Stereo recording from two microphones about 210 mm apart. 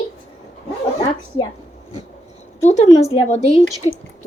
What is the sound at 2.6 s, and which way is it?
Speech, 35° left (ahead or behind).